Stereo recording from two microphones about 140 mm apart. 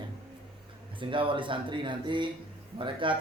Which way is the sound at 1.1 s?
35° right (ahead or behind).